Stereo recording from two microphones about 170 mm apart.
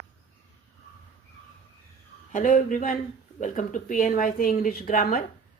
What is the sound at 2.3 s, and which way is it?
Speech, 50° left (ahead or behind).